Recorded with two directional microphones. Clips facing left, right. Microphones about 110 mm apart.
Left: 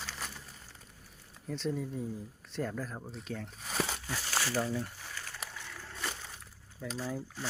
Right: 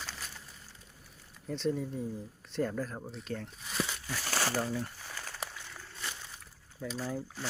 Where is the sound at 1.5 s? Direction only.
Centre (ahead or behind).